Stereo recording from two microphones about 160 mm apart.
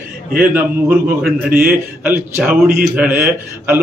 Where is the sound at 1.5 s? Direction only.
65° right (ahead or behind).